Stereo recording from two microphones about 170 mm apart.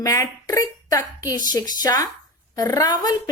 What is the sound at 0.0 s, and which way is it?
Speech, 20° left (ahead or behind).